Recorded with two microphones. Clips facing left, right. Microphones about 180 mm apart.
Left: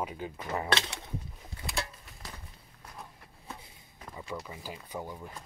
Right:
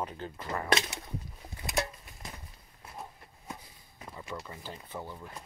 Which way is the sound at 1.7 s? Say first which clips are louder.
Right 4 dB; 20° right (ahead or behind).